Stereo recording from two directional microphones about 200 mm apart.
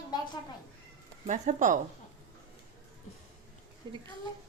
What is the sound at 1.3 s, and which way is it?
Speech, 40° right (ahead or behind).